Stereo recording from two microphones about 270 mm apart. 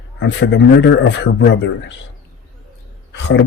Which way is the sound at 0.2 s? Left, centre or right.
Left.